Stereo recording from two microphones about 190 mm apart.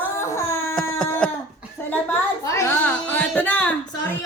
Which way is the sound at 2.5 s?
10° left (ahead or behind).